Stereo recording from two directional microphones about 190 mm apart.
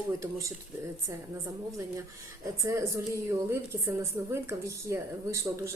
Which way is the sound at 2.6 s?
15° right (ahead or behind).